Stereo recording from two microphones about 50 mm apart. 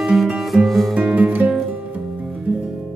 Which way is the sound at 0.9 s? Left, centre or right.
Right.